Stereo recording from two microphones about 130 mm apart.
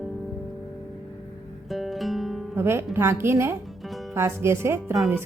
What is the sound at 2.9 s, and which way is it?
Speech, 20° right (ahead or behind).